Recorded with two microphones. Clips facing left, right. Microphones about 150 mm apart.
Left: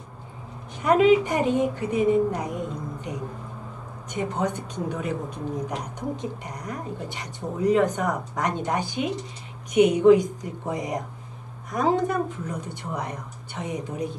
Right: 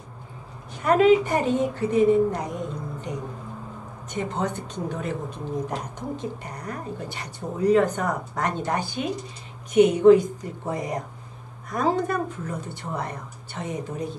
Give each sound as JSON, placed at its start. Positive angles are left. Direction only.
{"t": 0.8, "sound": "speech", "side_deg": 15}
{"t": 4.1, "sound": "speech", "side_deg": 10}